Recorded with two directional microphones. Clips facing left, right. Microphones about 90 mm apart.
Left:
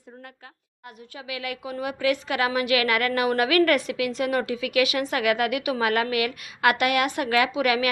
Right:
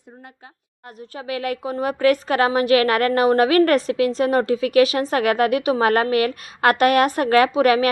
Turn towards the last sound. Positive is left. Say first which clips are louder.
# right 7 dB
turn(degrees=-40)  # may be behind; listen again after turning